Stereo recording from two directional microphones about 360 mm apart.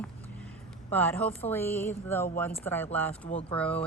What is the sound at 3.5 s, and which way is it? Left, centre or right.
Speech, centre.